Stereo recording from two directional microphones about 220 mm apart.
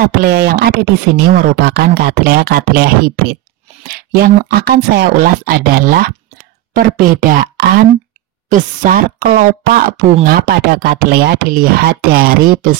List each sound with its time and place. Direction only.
0.2 s speech: 45° right (ahead or behind)
7.2 s speech: 40° right (ahead or behind)